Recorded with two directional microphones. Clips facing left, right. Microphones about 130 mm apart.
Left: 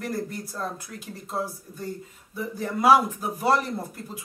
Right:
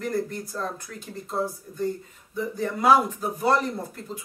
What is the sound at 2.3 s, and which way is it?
Speech, 5° left (ahead or behind).